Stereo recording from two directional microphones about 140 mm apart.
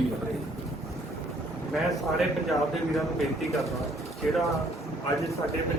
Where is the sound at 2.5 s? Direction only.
Centre (ahead or behind).